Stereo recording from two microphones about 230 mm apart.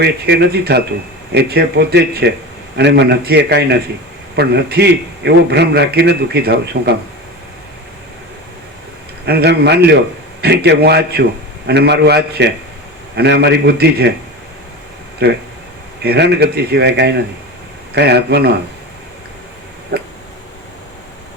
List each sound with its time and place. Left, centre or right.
0.0 s a man's voice: right
9.2 s a man's voice: right
15.2 s a man's voice: right
19.9 s a sound: right